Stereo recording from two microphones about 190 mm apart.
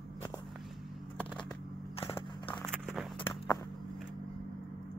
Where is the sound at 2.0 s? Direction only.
30° left (ahead or behind).